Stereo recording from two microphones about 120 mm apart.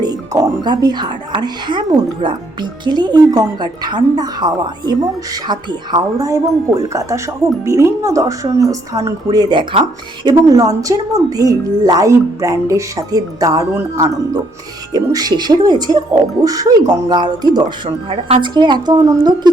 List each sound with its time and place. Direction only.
0.0 s speech: 35° right (ahead or behind)
17.8 s speech: 55° right (ahead or behind)
18.3 s speech: 40° right (ahead or behind)